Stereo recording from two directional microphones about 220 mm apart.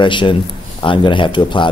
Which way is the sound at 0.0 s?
20° left (ahead or behind).